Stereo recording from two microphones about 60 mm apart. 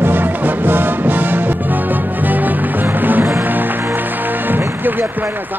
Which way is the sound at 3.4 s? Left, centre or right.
Right.